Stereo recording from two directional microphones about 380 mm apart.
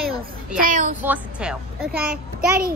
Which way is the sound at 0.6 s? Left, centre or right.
Centre.